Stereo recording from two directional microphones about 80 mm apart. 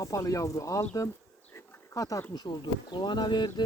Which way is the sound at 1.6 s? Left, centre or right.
Left.